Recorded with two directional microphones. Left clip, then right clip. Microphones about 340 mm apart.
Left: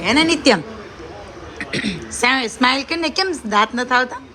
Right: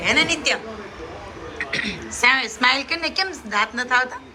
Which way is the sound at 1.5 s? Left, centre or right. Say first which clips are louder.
Left 1 dB; centre.